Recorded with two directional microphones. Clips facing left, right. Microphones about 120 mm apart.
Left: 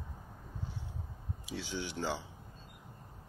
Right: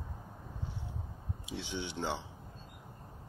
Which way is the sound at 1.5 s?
20° right (ahead or behind).